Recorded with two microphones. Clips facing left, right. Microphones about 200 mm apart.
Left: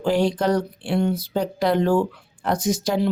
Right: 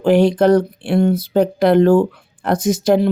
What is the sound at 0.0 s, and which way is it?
Speech, 60° right (ahead or behind).